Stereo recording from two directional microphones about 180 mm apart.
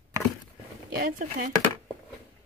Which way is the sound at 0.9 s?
50° right (ahead or behind).